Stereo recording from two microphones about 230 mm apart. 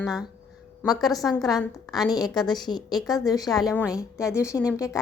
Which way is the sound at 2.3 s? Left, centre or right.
Centre.